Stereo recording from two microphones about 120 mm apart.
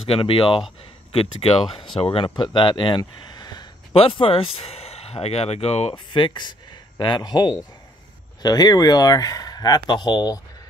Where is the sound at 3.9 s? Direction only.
50° left (ahead or behind).